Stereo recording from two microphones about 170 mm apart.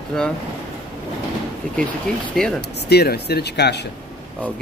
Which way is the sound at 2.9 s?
70° left (ahead or behind).